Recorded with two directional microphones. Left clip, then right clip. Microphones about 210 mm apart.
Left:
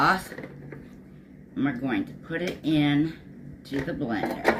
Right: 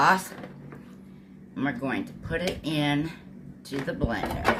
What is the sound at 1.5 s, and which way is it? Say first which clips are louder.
Speech: left 1 dB; 35° right (ahead or behind).